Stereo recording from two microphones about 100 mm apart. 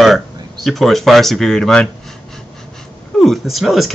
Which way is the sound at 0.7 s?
Centre (ahead or behind).